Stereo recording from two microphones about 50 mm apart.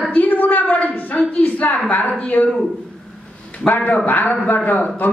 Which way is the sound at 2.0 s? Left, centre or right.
Centre.